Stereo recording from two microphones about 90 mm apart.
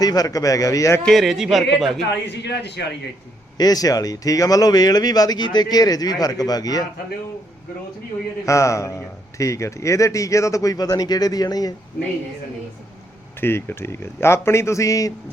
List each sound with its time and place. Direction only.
0.0 s speech: 45° left (ahead or behind)
1.0 s speech: centre (ahead or behind)
3.6 s speech: 45° left (ahead or behind)
8.4 s speech: 35° left (ahead or behind)
13.4 s a man's voice: 25° left (ahead or behind)